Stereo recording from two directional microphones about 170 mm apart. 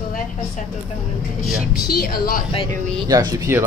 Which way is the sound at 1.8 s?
60° left (ahead or behind).